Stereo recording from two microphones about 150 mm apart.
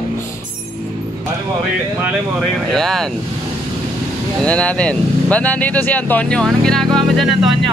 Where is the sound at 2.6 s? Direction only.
Centre (ahead or behind).